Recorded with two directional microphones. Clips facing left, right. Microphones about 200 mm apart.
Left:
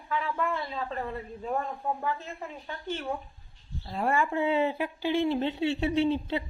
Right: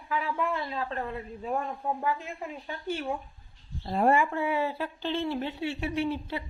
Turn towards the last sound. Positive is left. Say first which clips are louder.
# left 4 dB
turn(degrees=25)  # may be behind; listen again after turning